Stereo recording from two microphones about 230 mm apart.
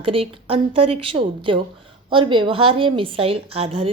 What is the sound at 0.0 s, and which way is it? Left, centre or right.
A woman's voice, right.